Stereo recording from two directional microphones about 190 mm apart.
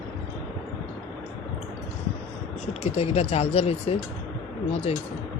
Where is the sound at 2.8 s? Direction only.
30° left (ahead or behind).